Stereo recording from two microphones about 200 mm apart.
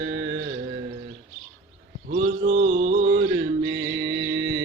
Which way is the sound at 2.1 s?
45° right (ahead or behind).